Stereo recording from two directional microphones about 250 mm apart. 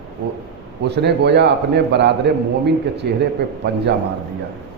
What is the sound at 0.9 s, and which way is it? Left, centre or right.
A man's voice, right.